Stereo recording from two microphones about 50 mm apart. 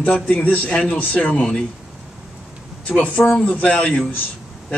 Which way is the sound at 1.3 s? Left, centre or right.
Centre.